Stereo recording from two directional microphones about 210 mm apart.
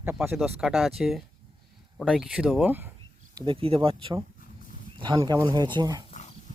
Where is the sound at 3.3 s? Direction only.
25° right (ahead or behind).